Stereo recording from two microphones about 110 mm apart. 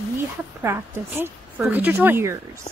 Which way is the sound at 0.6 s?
20° right (ahead or behind).